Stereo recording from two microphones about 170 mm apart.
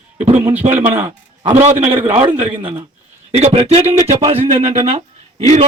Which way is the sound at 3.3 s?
35° right (ahead or behind).